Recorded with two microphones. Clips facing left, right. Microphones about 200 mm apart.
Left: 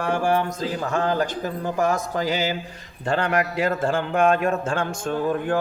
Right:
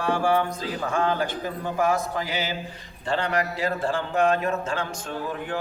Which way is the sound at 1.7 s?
45° left (ahead or behind).